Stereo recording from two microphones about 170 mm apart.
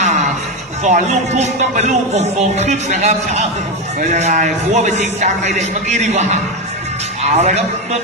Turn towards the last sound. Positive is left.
turn(degrees=-40)  # may be behind; listen again after turning